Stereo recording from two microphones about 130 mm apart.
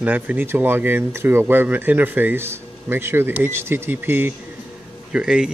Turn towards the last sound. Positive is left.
turn(degrees=-5)  # may be behind; listen again after turning